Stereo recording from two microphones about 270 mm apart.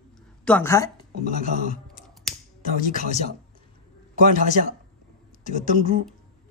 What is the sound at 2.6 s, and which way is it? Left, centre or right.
Speech, left.